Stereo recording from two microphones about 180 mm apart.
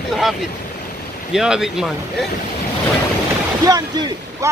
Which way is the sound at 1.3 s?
5° right (ahead or behind).